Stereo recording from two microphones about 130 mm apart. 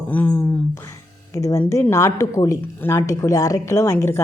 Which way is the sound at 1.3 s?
25° left (ahead or behind).